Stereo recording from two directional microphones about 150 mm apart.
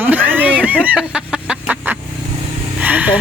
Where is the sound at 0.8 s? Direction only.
5° right (ahead or behind).